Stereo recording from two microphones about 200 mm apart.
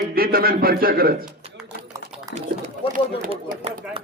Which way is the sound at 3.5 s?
45° right (ahead or behind).